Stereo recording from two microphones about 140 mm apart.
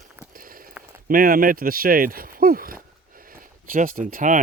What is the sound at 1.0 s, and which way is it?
Speech, 90° right.